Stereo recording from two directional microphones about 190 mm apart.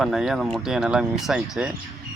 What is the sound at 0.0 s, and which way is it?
Speech, centre (ahead or behind).